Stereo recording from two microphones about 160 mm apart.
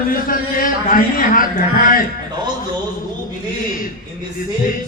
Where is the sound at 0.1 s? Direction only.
60° left (ahead or behind).